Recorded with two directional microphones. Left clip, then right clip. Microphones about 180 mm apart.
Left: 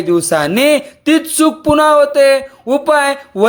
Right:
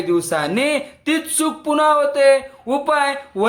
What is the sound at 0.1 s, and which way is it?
Speech, 30° left (ahead or behind).